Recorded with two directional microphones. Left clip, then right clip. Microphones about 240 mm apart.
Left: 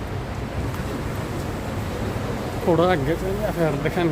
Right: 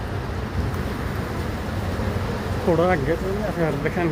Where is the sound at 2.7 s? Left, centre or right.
Centre.